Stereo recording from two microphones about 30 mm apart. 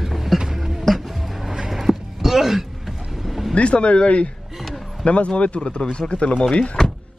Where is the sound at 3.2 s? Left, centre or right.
Centre.